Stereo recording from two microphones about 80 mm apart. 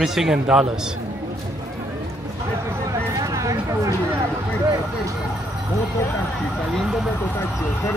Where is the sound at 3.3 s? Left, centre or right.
Right.